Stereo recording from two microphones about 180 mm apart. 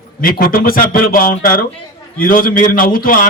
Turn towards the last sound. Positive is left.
turn(degrees=50)  # may be behind; listen again after turning